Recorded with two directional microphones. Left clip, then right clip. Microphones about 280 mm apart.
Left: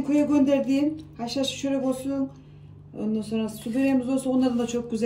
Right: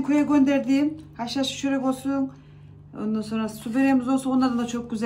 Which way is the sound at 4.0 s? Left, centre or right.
Right.